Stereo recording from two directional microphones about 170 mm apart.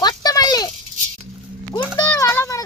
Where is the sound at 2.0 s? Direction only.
20° left (ahead or behind).